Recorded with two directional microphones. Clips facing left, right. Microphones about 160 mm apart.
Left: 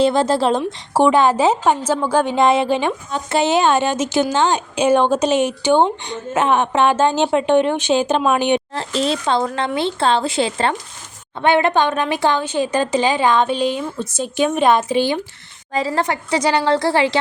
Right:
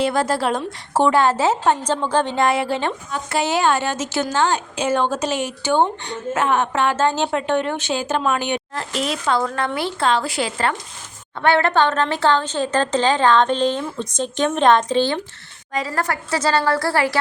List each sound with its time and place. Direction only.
0.0 s a woman's voice: 25° left (ahead or behind)
0.9 s a woman's voice: 15° left (ahead or behind)
15.7 s a woman's voice: 25° left (ahead or behind)